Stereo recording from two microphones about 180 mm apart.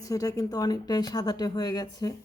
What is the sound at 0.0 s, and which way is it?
A woman's voice, 20° left (ahead or behind).